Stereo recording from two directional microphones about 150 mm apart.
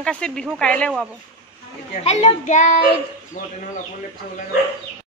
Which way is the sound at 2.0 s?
50° left (ahead or behind).